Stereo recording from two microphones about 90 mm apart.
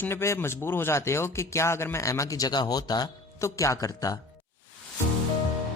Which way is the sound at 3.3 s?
35° left (ahead or behind).